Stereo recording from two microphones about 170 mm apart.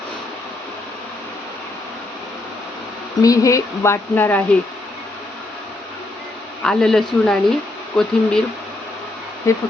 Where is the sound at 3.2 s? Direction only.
20° left (ahead or behind).